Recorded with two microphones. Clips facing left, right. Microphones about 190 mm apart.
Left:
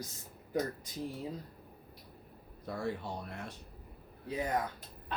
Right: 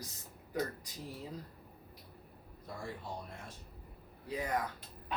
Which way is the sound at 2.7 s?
70° left (ahead or behind).